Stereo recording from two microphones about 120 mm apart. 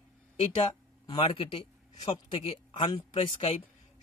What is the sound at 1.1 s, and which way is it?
Speech, 55° left (ahead or behind).